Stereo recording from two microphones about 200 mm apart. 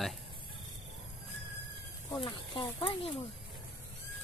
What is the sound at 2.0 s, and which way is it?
Speech, 20° left (ahead or behind).